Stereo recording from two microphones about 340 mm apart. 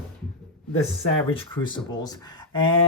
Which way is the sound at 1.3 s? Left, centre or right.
Centre.